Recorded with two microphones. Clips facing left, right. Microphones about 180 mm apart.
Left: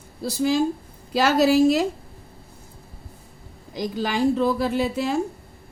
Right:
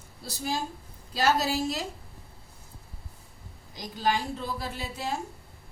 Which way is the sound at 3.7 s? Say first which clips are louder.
Left 3 dB; 80° left.